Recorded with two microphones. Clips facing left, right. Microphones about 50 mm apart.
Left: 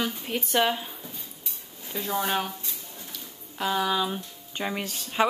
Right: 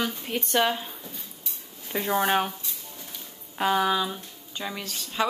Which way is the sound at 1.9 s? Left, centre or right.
Right.